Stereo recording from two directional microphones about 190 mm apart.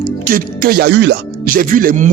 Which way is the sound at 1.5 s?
45° right (ahead or behind).